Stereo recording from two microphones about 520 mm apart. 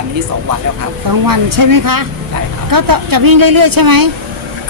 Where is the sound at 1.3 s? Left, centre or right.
Right.